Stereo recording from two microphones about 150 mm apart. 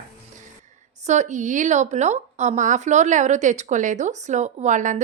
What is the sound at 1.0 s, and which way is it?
A woman's voice, 50° right (ahead or behind).